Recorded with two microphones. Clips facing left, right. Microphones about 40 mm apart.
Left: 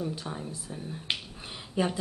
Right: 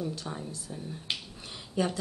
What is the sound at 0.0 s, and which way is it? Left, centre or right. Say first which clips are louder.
Speech: left 1 dB; centre.